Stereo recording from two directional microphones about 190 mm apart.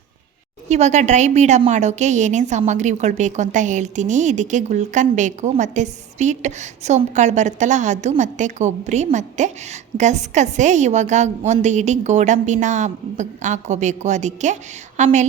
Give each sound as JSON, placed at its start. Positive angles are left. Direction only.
{"t": 0.7, "sound": "a woman's voice", "side_deg": -35}